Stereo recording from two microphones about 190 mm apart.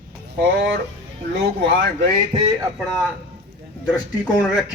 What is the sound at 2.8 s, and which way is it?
Speech, centre (ahead or behind).